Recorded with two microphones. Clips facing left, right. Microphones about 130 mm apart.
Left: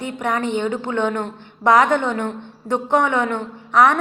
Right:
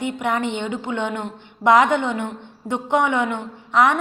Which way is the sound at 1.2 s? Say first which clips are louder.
Even; 20° right (ahead or behind).